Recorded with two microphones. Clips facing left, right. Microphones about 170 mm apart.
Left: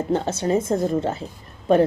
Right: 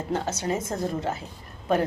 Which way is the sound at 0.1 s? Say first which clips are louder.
Left 6 dB; 30° left (ahead or behind).